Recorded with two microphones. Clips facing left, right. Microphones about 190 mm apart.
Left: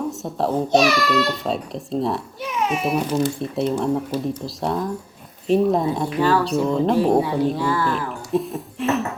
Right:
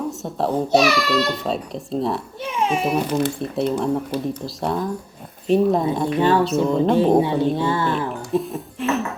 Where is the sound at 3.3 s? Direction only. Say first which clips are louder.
Even; centre (ahead or behind).